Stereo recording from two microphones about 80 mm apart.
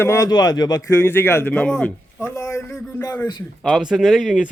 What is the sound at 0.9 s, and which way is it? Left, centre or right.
Speech, left.